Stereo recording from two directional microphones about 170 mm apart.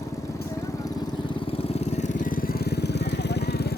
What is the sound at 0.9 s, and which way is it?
Vehicle, 25° left (ahead or behind).